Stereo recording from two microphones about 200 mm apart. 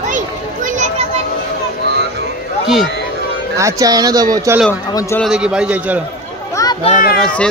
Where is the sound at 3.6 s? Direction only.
15° right (ahead or behind).